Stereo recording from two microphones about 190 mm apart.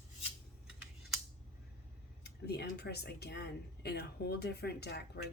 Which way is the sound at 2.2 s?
60° left (ahead or behind).